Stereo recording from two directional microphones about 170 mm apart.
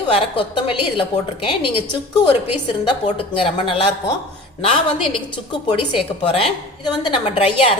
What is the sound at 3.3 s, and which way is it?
Speech, 30° left (ahead or behind).